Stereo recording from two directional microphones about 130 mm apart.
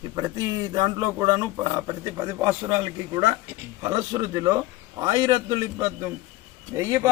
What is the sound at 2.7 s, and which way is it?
Speech, 35° right (ahead or behind).